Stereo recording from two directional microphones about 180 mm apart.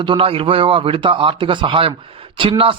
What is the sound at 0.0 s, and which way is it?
A man's voice, 30° right (ahead or behind).